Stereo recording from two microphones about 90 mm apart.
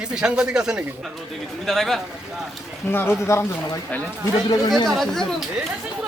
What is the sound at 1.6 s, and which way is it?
Speech, 5° left (ahead or behind).